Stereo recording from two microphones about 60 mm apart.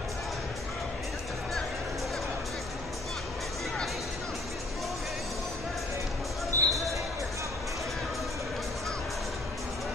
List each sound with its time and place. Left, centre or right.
6.5 s basketball bounce: left